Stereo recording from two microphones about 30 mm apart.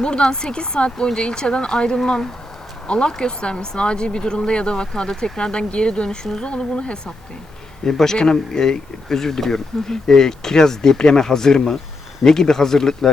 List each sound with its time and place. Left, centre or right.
0.0 s speech: left
2.0 s speech: centre
2.8 s speech: left
7.9 s speech: centre